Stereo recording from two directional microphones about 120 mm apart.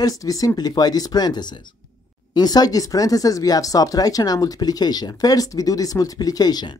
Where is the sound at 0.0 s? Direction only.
30° left (ahead or behind).